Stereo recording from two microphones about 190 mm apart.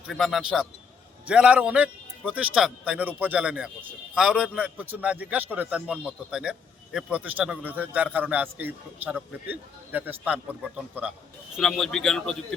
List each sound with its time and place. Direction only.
0.1 s a man's voice: centre (ahead or behind)
11.5 s speech: centre (ahead or behind)